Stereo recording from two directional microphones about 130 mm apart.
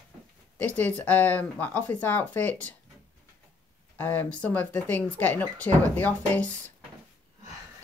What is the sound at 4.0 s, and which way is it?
Speech, 15° left (ahead or behind).